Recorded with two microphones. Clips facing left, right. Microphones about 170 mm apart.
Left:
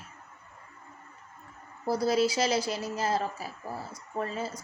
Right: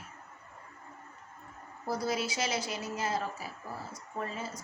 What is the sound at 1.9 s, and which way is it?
A woman's voice, 35° left (ahead or behind).